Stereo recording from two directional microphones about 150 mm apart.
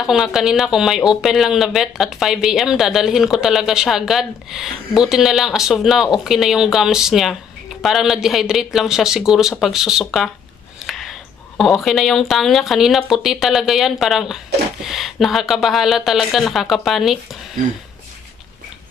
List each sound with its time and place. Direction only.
0.0 s speech: centre (ahead or behind)